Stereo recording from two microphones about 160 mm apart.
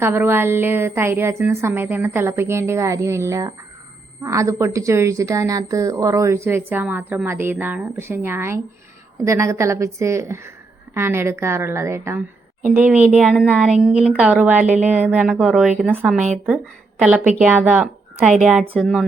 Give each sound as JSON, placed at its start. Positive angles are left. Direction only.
{"t": 0.0, "sound": "a woman's voice", "side_deg": -15}
{"t": 15.9, "sound": "a woman's voice", "side_deg": -15}
{"t": 16.1, "sound": "speech", "side_deg": -45}
{"t": 17.0, "sound": "a woman's voice", "side_deg": -10}
{"t": 18.8, "sound": "speech", "side_deg": 0}